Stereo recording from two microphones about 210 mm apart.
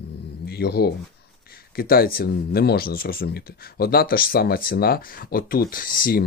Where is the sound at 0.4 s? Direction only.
50° left (ahead or behind).